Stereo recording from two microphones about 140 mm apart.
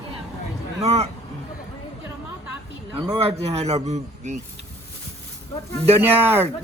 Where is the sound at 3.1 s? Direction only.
45° right (ahead or behind).